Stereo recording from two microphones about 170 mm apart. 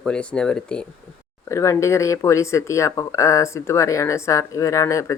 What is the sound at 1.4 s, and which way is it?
Speech, 15° left (ahead or behind).